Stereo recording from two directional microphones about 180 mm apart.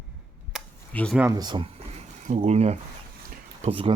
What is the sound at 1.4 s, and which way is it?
Speech, 25° right (ahead or behind).